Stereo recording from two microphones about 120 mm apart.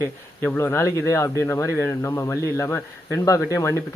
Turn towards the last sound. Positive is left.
turn(degrees=20)  # may be behind; listen again after turning